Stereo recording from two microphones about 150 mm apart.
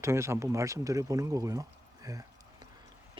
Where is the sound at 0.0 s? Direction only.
20° right (ahead or behind).